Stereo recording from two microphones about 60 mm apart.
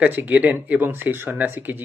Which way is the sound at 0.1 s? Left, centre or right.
Right.